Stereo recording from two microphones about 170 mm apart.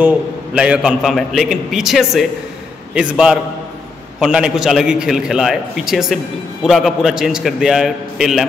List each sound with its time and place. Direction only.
0.6 s a man's voice: 5° right (ahead or behind)